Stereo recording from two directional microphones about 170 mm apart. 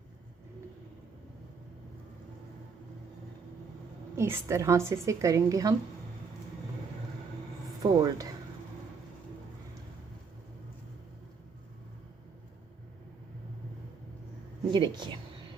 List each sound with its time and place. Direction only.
4.2 s a woman's voice: 15° right (ahead or behind)
7.8 s speech: 20° right (ahead or behind)
14.7 s speech: 25° right (ahead or behind)